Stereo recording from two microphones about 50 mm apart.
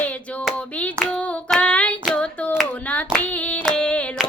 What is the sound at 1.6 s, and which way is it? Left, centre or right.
Child singing, left.